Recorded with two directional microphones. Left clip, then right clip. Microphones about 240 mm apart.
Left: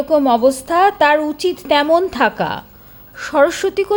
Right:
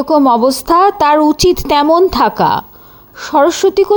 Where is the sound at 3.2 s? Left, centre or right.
Centre.